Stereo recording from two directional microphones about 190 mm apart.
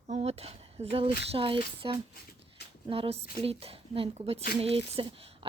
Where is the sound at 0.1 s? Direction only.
35° right (ahead or behind).